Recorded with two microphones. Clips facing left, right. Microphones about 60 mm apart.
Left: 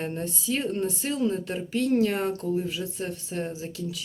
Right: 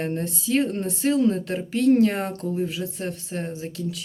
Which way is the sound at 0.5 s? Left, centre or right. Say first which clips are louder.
Right 4 dB; right.